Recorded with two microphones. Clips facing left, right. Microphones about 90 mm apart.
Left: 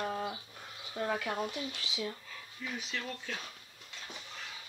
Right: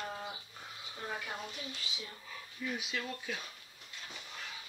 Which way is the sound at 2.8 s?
10° right (ahead or behind).